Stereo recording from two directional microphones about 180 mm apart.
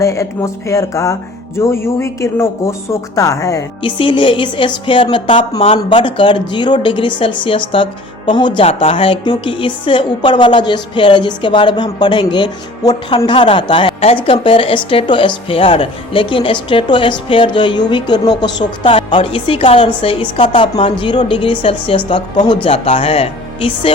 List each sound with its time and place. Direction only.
0.0 s speech: 15° left (ahead or behind)